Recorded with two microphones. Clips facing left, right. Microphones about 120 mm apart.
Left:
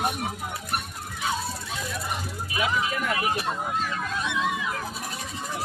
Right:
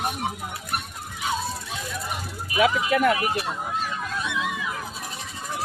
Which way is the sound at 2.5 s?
70° right (ahead or behind).